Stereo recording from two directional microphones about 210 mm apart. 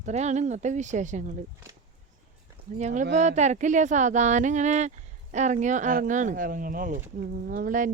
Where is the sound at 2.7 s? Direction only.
35° right (ahead or behind).